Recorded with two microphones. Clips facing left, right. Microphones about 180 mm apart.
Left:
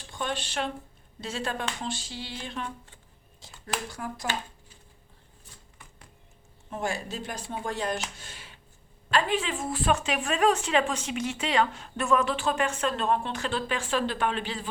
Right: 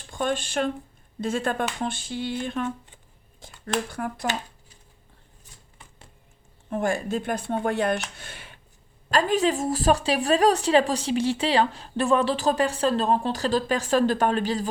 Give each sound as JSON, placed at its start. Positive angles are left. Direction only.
{"t": 0.1, "sound": "speech", "side_deg": -45}
{"t": 1.2, "sound": "a sound", "side_deg": -50}
{"t": 3.8, "sound": "speech", "side_deg": -55}
{"t": 6.7, "sound": "speech", "side_deg": -55}
{"t": 9.0, "sound": "a woman's voice", "side_deg": -40}